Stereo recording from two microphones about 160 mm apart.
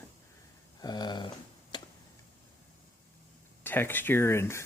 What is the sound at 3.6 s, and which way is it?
Speech, 15° left (ahead or behind).